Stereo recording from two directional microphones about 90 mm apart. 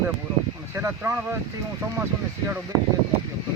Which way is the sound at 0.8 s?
30° right (ahead or behind).